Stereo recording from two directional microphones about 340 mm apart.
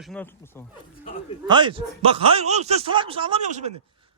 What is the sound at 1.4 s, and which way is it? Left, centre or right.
Speech, centre.